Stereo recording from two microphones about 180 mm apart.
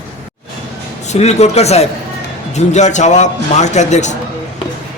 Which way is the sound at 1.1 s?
40° left (ahead or behind).